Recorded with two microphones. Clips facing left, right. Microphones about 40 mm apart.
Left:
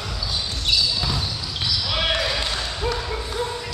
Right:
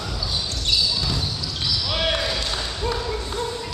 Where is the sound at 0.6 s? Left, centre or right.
Centre.